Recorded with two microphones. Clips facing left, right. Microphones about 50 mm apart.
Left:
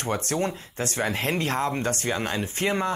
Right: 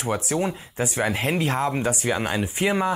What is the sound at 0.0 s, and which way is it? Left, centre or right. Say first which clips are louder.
Speech: right 2 dB; centre.